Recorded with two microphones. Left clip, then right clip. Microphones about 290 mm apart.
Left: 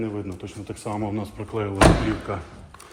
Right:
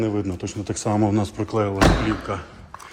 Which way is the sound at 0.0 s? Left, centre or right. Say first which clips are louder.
Right 6 dB; right.